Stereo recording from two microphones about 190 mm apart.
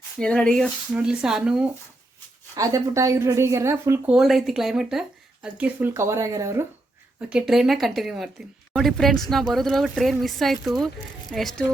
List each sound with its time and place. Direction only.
0.2 s speech: 5° left (ahead or behind)
2.6 s a woman's voice: 15° right (ahead or behind)
7.2 s speech: 5° right (ahead or behind)